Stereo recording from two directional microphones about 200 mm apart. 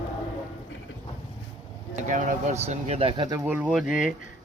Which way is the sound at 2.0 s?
40° right (ahead or behind).